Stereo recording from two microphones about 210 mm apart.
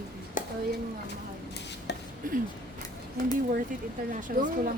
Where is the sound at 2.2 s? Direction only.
40° right (ahead or behind).